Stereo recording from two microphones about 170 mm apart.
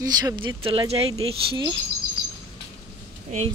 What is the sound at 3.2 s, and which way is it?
Speech, 40° right (ahead or behind).